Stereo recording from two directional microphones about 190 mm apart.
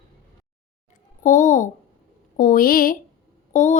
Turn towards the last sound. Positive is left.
turn(degrees=40)  # may be behind; listen again after turning